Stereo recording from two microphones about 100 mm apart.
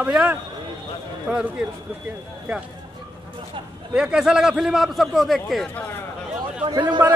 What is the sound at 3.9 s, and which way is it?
A man's voice, 5° right (ahead or behind).